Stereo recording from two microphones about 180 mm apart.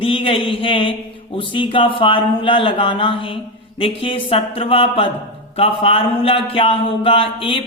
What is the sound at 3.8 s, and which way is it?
Speech, 30° left (ahead or behind).